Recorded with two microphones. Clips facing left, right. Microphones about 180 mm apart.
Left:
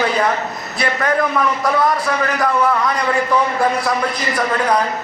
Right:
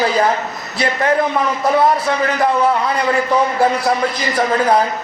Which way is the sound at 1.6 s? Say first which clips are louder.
Right 3 dB; 30° right (ahead or behind).